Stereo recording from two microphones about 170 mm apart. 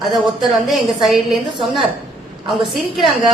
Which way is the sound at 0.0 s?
Centre (ahead or behind).